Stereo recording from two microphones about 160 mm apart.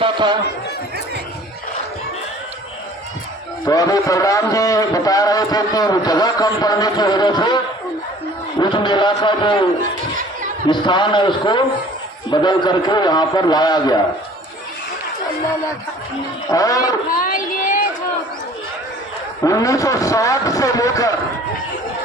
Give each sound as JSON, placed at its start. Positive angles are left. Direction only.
{"t": 0.0, "sound": "run", "side_deg": -30}
{"t": 3.6, "sound": "a man's voice", "side_deg": 20}
{"t": 10.7, "sound": "a man's voice", "side_deg": 30}
{"t": 16.5, "sound": "a man's voice", "side_deg": 20}
{"t": 17.1, "sound": "a sound", "side_deg": 60}
{"t": 19.5, "sound": "a man's voice", "side_deg": 20}